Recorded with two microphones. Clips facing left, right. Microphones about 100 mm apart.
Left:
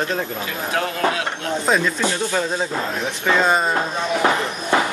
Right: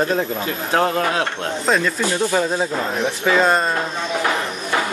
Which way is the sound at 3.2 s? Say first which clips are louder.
Right 1 dB; centre (ahead or behind).